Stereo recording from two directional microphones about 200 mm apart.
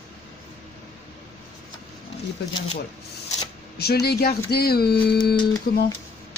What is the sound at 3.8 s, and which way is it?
Speech, 55° left (ahead or behind).